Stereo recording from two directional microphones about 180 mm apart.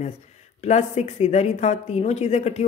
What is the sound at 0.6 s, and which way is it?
Speech, 40° left (ahead or behind).